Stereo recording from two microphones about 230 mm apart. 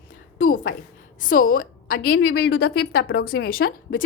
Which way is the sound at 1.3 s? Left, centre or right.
Left.